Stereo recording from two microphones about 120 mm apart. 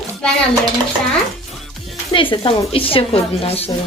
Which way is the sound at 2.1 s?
45° left (ahead or behind).